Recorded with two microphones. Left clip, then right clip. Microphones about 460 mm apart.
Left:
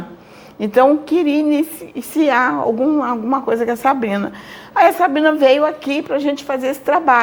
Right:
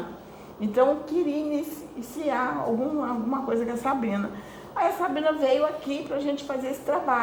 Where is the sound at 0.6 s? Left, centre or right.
Left.